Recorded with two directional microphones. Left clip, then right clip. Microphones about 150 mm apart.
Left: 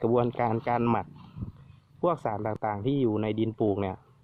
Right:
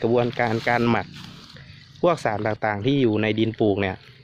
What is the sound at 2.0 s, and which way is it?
Speech, 15° left (ahead or behind).